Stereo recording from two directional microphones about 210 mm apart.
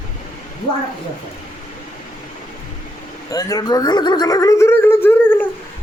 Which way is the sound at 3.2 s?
15° left (ahead or behind).